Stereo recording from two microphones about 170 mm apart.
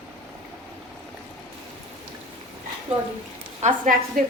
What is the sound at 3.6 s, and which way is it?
Speech, 50° right (ahead or behind).